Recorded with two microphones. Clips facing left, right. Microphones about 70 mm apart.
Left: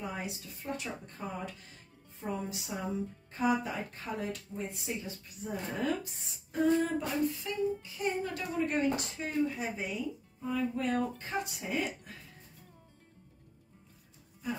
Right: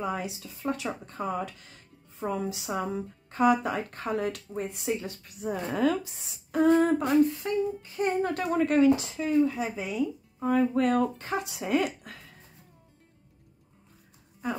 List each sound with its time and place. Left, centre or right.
0.0 s a woman's voice: right
6.5 s a sound: right
9.6 s speech: right